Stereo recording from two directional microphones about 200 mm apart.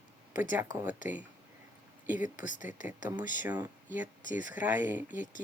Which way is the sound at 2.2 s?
40° left (ahead or behind).